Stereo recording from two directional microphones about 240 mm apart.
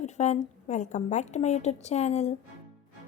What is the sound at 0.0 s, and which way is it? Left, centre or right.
A woman's voice, left.